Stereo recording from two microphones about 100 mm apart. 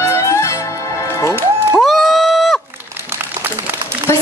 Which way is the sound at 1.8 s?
Centre (ahead or behind).